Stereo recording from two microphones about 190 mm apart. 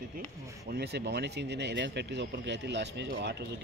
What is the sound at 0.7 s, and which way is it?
Speech, 60° right (ahead or behind).